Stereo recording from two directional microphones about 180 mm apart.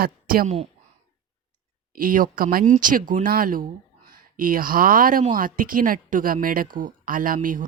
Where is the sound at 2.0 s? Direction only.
50° right (ahead or behind).